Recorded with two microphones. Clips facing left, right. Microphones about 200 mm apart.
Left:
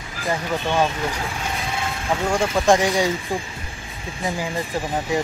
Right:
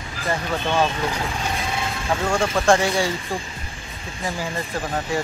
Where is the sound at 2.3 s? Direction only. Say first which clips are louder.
Left 1 dB; 15° left (ahead or behind).